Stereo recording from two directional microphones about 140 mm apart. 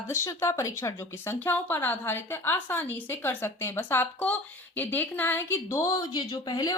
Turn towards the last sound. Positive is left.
turn(degrees=30)  # may be behind; listen again after turning